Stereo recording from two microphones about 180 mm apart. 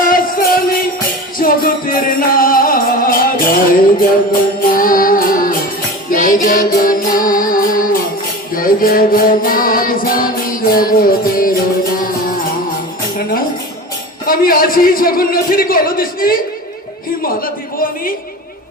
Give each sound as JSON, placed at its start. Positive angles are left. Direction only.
{"t": 0.0, "sound": "music", "side_deg": 50}
{"t": 14.3, "sound": "a man's voice", "side_deg": 50}
{"t": 17.2, "sound": "a sound", "side_deg": 55}